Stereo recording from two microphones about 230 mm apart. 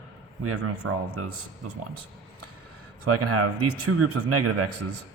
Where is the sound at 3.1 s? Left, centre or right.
Right.